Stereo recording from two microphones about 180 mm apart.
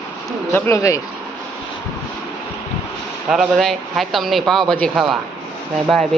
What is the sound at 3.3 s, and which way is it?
Speech, centre (ahead or behind).